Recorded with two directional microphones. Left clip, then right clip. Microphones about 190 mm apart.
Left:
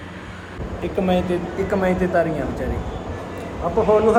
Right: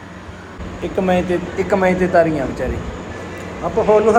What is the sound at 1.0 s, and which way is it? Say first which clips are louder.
A man's voice: right 4 dB; 5° right (ahead or behind).